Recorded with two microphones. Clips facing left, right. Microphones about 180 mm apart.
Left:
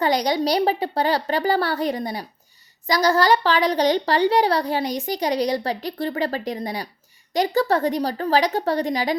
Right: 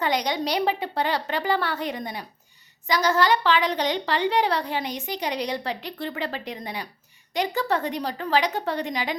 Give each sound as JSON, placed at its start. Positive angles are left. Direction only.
{"t": 0.0, "sound": "a woman's voice", "side_deg": 35}